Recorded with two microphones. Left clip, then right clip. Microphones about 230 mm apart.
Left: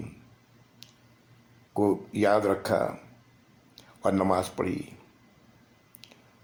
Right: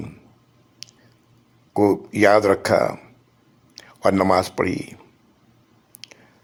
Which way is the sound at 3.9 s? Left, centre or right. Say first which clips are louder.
Right 8 dB; right.